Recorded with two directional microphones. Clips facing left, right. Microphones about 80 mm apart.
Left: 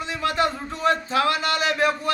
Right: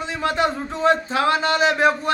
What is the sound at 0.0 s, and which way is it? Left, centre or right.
A man's voice, right.